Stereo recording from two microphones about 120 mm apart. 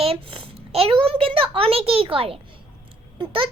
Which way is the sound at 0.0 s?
55° right (ahead or behind).